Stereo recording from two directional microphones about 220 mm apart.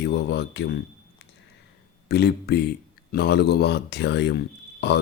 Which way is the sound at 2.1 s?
50° left (ahead or behind).